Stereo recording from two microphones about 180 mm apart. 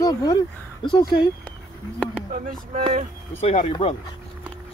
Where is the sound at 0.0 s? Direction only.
20° left (ahead or behind).